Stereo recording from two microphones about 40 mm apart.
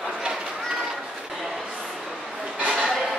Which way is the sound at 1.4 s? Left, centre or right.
Centre.